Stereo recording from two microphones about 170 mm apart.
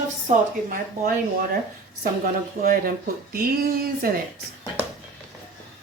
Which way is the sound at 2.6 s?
60° right (ahead or behind).